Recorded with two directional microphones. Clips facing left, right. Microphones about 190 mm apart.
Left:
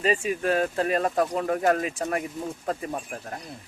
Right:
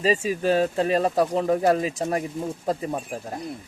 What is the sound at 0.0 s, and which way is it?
Speech, 30° right (ahead or behind).